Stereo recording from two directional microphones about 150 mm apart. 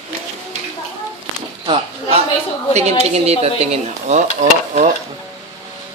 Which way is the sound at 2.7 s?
45° right (ahead or behind).